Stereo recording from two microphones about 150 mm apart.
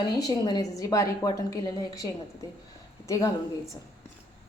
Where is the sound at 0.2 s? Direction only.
25° left (ahead or behind).